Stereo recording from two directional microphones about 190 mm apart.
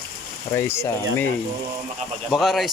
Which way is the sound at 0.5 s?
15° left (ahead or behind).